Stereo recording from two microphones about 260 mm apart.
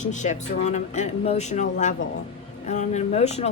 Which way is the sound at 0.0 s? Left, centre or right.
Left.